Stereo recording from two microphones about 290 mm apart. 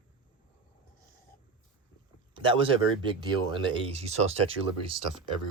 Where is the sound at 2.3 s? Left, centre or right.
Centre.